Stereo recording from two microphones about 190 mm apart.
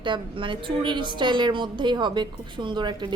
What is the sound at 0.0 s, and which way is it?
A woman's voice, 25° right (ahead or behind).